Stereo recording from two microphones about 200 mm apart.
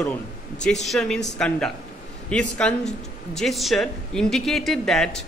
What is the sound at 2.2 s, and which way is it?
Speech, 5° left (ahead or behind).